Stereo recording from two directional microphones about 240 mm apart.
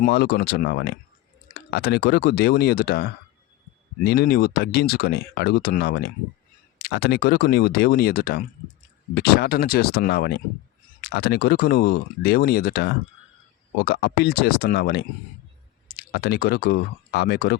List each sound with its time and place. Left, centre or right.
0.0 s speech: left